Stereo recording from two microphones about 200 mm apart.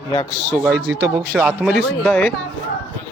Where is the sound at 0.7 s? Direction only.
60° right (ahead or behind).